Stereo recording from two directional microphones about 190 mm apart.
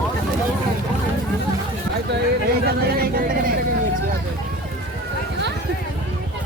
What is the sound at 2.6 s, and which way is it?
Vehicle, 50° right (ahead or behind).